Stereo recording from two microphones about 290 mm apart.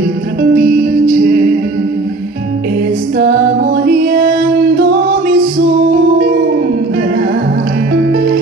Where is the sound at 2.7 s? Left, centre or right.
Right.